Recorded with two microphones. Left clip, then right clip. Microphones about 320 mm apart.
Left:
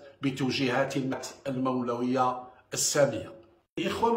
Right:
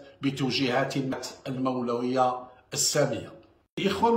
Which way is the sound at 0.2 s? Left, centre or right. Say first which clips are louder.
Right 2 dB; centre.